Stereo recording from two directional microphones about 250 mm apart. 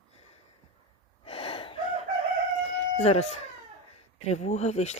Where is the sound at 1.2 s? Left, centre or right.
Left.